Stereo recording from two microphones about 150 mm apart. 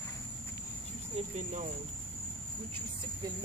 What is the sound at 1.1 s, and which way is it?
Speech, 50° right (ahead or behind).